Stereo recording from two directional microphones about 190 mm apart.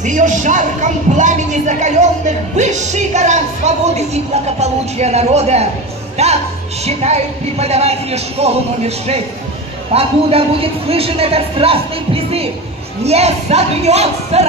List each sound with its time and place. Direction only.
0.0 s a man's voice: 40° right (ahead or behind)